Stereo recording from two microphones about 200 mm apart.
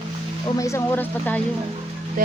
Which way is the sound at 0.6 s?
15° left (ahead or behind).